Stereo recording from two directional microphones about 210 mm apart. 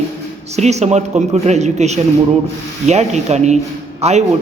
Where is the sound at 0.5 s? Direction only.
30° right (ahead or behind).